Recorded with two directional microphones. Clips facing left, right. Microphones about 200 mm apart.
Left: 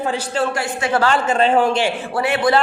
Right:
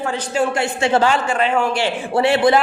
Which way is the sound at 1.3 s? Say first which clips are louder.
Left 3 dB; 30° left (ahead or behind).